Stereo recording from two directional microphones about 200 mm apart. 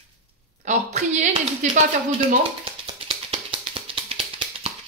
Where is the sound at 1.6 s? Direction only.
40° right (ahead or behind).